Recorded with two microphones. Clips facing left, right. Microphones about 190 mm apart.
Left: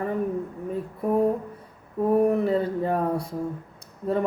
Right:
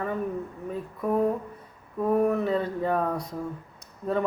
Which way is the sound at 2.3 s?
30° left (ahead or behind).